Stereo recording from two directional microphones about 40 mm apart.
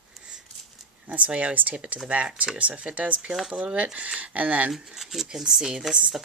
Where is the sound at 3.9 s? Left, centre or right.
Right.